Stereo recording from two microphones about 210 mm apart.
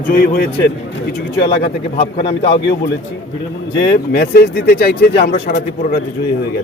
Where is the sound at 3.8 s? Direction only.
50° left (ahead or behind).